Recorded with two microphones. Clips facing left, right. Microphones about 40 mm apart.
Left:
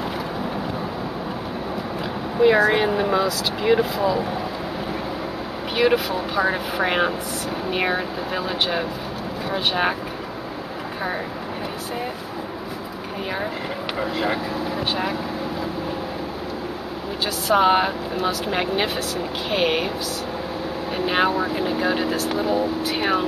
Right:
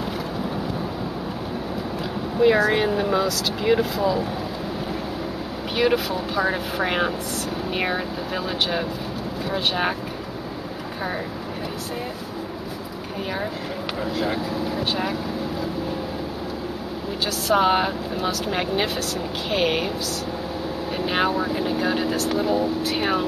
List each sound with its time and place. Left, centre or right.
2.4 s speech: centre
5.8 s speech: centre
13.9 s speech: left
17.5 s speech: centre
20.9 s speech: centre